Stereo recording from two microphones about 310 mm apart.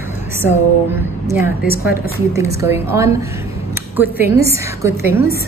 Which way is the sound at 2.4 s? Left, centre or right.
Centre.